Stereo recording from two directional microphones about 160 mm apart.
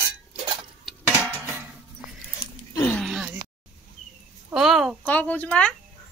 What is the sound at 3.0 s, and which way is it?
Groan, centre (ahead or behind).